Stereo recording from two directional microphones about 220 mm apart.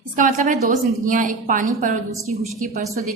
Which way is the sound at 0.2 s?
35° right (ahead or behind).